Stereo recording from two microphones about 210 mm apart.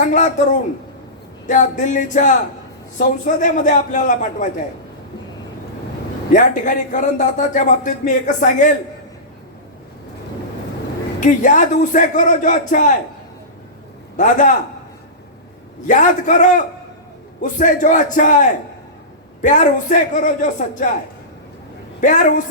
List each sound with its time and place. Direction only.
0.0 s speech: 35° left (ahead or behind)
1.5 s speech: 35° left (ahead or behind)
6.3 s speech: 40° left (ahead or behind)
11.2 s speech: 35° left (ahead or behind)
14.2 s speech: 35° left (ahead or behind)
15.9 s speech: 35° left (ahead or behind)
22.0 s speech: 35° left (ahead or behind)